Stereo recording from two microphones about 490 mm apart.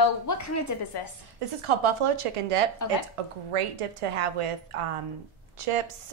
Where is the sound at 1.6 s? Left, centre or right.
Right.